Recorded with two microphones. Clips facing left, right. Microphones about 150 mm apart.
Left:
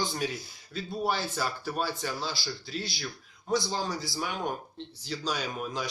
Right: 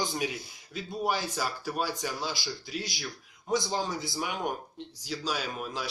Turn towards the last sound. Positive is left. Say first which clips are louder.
# left 1 dB
turn(degrees=0)  # may be behind; listen again after turning